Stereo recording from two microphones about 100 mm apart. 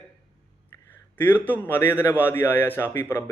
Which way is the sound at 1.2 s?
15° left (ahead or behind).